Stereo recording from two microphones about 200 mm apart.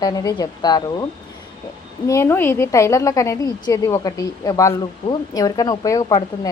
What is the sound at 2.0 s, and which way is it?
A woman's voice, 15° left (ahead or behind).